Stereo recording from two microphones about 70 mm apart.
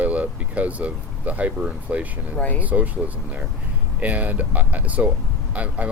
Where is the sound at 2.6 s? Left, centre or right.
Right.